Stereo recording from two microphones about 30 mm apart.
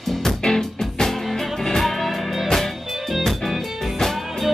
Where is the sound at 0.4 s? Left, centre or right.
Left.